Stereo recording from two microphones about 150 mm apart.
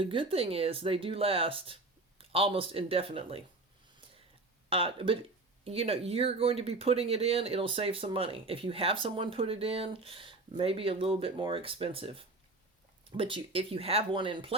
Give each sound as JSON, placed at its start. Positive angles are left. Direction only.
{"t": 0.0, "sound": "speech", "side_deg": -35}
{"t": 4.7, "sound": "speech", "side_deg": -35}